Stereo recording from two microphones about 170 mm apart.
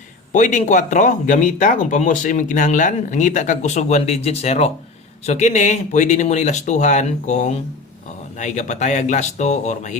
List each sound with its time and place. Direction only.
0.3 s speech: 45° left (ahead or behind)